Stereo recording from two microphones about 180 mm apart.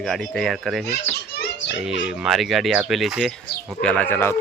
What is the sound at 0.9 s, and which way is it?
Baby laughter, 65° left (ahead or behind).